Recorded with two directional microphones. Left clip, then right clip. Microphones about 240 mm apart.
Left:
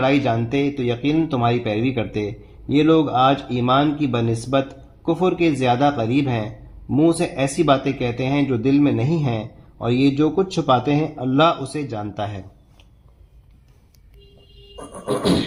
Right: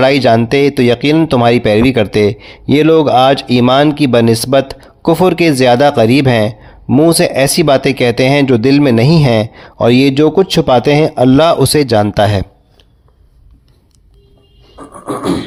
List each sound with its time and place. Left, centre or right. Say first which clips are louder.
0.0 s speech: right 11 dB; right
15.0 s beatboxing: right 4 dB; right